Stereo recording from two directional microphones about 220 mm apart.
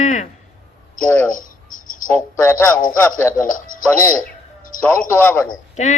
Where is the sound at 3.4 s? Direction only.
35° left (ahead or behind).